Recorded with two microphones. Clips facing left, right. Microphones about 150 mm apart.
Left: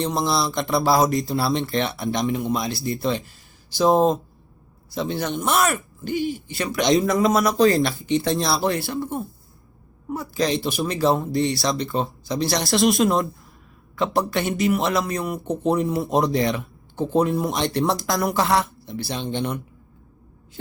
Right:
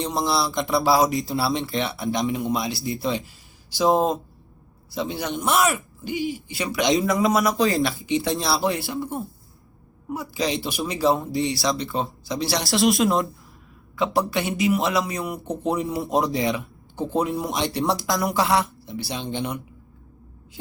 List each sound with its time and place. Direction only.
0.1 s a man's voice: 10° right (ahead or behind)
4.9 s a man's voice: 15° right (ahead or behind)
5.5 s a man's voice: centre (ahead or behind)
6.1 s speech: 45° left (ahead or behind)
6.6 s a man's voice: 10° right (ahead or behind)